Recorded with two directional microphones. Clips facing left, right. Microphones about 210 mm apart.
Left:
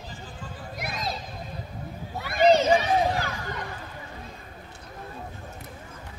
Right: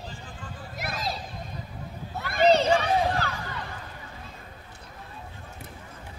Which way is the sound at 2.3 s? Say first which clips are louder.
Left 1 dB; 15° left (ahead or behind).